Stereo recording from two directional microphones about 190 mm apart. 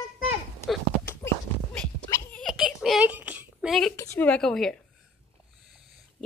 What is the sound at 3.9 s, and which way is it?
Speech, 15° left (ahead or behind).